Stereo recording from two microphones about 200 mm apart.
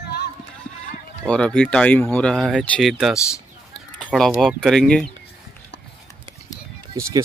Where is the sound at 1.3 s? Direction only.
5° left (ahead or behind).